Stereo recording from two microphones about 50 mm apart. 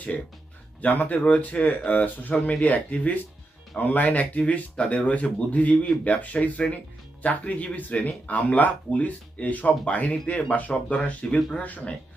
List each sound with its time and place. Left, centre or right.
0.8 s speech: left